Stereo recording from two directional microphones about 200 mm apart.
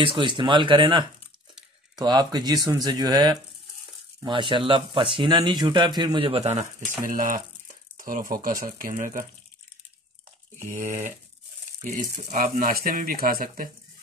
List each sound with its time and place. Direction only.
0.0 s speech: 25° right (ahead or behind)
7.1 s speech: 40° right (ahead or behind)
10.7 s speech: 40° right (ahead or behind)